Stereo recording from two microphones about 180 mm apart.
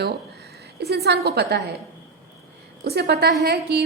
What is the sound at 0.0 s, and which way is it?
A woman's voice, 65° right (ahead or behind).